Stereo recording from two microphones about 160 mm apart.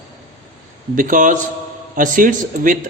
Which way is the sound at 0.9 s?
55° right (ahead or behind).